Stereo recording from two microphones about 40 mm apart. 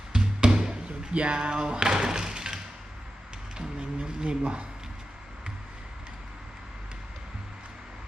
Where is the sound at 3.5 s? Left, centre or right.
Right.